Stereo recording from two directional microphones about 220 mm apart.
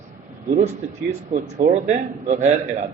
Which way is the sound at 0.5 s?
35° right (ahead or behind).